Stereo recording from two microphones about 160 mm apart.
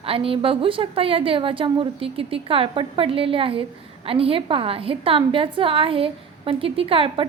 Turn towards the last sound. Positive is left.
turn(degrees=-35)  # may be behind; listen again after turning